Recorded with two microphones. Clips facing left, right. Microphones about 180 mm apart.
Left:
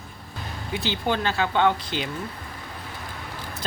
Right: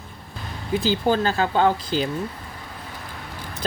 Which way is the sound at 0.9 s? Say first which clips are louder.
Right 3 dB; 40° right (ahead or behind).